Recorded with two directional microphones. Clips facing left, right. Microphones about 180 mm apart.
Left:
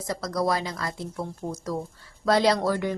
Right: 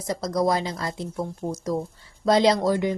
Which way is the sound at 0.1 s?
20° right (ahead or behind).